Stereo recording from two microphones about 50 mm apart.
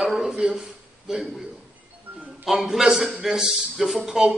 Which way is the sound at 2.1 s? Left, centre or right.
Right.